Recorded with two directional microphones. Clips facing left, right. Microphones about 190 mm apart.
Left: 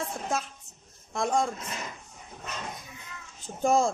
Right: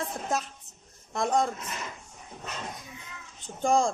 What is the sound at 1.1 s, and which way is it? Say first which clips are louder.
Speech: right 1 dB; centre (ahead or behind).